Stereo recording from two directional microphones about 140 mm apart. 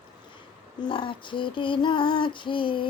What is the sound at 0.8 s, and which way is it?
Female singing, 35° left (ahead or behind).